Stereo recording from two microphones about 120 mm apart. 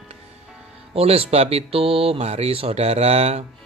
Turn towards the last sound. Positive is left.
turn(degrees=-60)  # may be behind; listen again after turning